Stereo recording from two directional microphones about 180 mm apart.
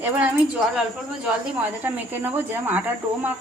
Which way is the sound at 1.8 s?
10° right (ahead or behind).